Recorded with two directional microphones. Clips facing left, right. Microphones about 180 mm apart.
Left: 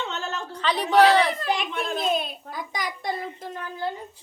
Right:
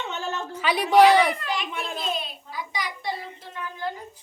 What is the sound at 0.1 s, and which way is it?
Speech, 15° right (ahead or behind).